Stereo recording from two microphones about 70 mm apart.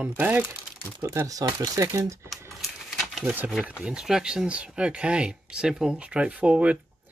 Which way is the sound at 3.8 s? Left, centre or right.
Centre.